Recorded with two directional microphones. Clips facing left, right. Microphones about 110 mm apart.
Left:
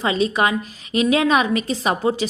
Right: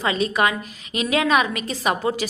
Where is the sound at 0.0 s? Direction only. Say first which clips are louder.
Left 2 dB; 30° left (ahead or behind).